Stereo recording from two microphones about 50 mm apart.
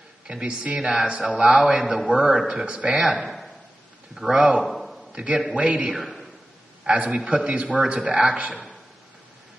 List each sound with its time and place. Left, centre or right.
0.3 s speech: centre
1.3 s a man's voice: centre; by 3.1 s right
3.1 s a man's voice: centre
4.6 s a sound: centre
5.1 s a man's voice: right
5.9 s a sound: centre
7.1 s a man's voice: centre
7.4 s a man's voice: right
8.5 s a man's voice: centre